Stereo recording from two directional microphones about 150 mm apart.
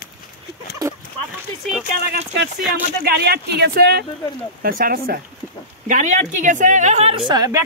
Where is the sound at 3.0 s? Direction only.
90° right.